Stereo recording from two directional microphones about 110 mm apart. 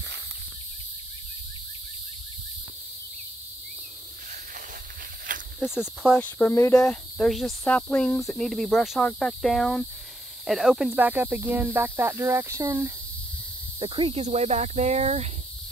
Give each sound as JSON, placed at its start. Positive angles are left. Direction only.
{"t": 6.3, "sound": "speech", "side_deg": 25}
{"t": 6.7, "sound": "speech", "side_deg": 5}
{"t": 7.6, "sound": "speech", "side_deg": 10}
{"t": 11.0, "sound": "speech", "side_deg": -15}
{"t": 13.7, "sound": "speech", "side_deg": -50}
{"t": 14.2, "sound": "speech", "side_deg": -85}